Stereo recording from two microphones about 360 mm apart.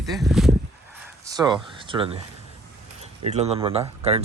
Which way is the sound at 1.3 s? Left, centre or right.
Centre.